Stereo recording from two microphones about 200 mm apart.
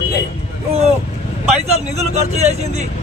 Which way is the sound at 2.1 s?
35° right (ahead or behind).